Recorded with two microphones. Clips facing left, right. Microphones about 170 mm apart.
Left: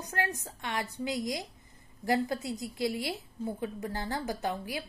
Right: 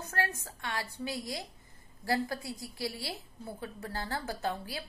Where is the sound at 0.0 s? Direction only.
15° left (ahead or behind).